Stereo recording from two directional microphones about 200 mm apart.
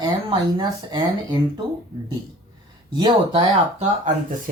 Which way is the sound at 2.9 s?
25° right (ahead or behind).